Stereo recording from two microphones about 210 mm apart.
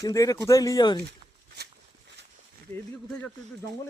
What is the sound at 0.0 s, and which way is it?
Speech, 15° left (ahead or behind).